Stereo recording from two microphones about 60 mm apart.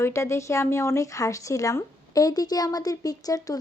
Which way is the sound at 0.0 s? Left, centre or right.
Left.